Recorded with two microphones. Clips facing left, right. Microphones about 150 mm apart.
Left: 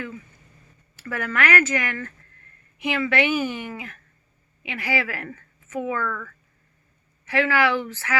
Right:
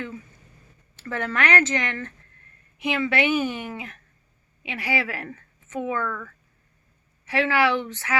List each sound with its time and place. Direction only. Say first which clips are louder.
0.9 s speech: even; 25° right (ahead or behind)